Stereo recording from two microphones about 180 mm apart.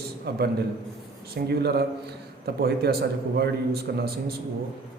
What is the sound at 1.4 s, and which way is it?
Speech, 60° right (ahead or behind).